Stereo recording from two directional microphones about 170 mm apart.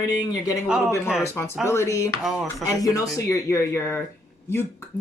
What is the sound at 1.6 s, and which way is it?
Speech, 15° left (ahead or behind).